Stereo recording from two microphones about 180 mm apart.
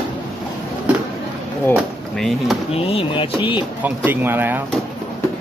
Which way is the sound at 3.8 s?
10° right (ahead or behind).